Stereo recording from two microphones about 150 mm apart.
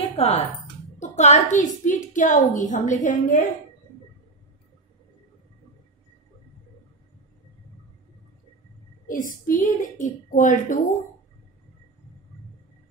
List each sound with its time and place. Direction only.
0.1 s a woman's voice: 45° left (ahead or behind); by 3.4 s 60° left (ahead or behind)
9.0 s a woman's voice: 65° left (ahead or behind)